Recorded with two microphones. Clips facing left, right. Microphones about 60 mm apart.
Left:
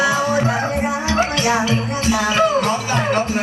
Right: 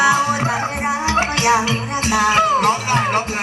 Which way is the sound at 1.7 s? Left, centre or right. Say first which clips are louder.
Even; right.